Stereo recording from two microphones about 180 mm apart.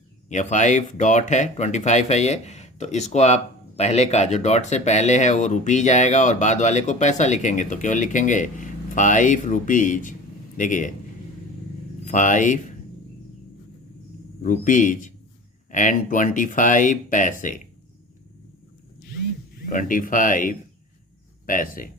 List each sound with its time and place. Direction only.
0.3 s speech: 40° left (ahead or behind)
12.0 s speech: 45° left (ahead or behind)
14.4 s speech: 45° left (ahead or behind)
19.6 s speech: 50° left (ahead or behind)